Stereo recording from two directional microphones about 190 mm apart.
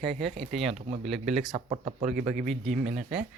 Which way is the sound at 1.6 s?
30° right (ahead or behind).